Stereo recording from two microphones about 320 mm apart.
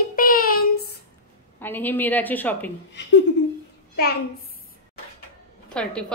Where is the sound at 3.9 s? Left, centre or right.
Left.